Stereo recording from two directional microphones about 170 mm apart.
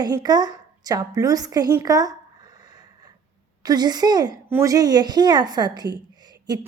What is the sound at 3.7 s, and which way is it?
A woman's voice, 25° right (ahead or behind).